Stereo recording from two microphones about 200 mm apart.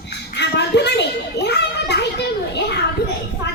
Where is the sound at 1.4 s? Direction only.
55° left (ahead or behind).